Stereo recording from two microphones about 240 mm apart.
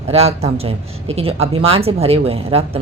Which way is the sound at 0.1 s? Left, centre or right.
Right.